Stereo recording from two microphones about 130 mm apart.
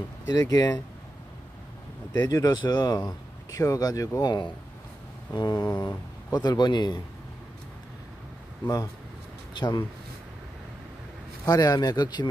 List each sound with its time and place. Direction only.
0.3 s speech: 30° left (ahead or behind)
2.1 s speech: 30° left (ahead or behind)
9.5 s speech: 35° left (ahead or behind)
11.4 s speech: 30° left (ahead or behind)